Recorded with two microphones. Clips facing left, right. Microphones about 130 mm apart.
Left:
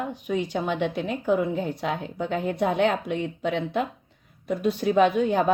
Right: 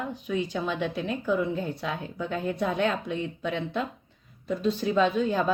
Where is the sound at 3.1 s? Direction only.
65° left (ahead or behind).